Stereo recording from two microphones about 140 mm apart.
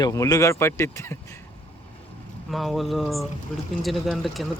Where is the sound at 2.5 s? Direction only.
Centre (ahead or behind).